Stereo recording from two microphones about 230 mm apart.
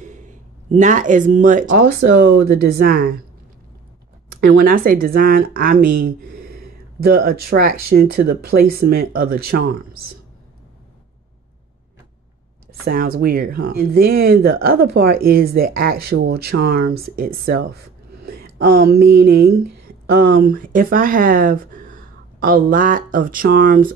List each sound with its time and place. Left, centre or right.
0.0 s speech: right
4.3 s speech: right
12.8 s speech: right